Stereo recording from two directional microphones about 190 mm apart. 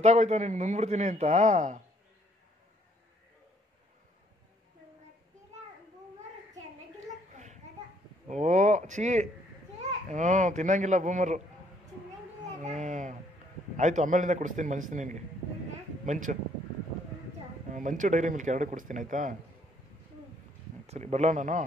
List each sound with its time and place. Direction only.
0.0 s a man's voice: 35° right (ahead or behind)
8.3 s a man's voice: 40° right (ahead or behind)
12.6 s a man's voice: 40° right (ahead or behind)
17.7 s speech: 40° right (ahead or behind)
20.8 s a man's voice: 35° right (ahead or behind)